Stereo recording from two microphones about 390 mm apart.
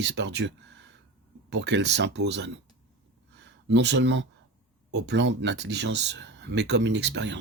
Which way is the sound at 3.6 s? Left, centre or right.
Right.